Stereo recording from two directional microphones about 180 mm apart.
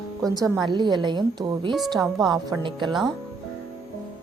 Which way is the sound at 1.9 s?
Centre (ahead or behind).